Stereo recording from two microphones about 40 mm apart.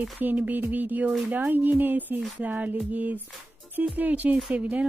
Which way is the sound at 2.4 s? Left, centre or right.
Right.